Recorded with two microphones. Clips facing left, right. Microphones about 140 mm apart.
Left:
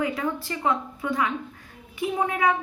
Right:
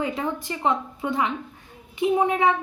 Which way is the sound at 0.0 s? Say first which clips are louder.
Even; 25° right (ahead or behind).